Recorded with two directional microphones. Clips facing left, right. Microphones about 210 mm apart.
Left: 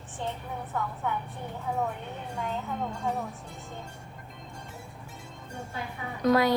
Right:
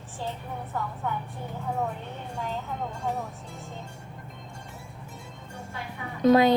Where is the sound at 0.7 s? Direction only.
Centre (ahead or behind).